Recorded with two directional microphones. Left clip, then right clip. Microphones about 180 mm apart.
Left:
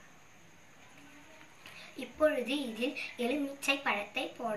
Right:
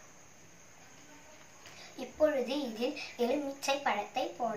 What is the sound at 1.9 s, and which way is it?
A child's voice, 20° right (ahead or behind).